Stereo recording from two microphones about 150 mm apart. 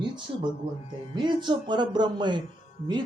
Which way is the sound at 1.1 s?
30° right (ahead or behind).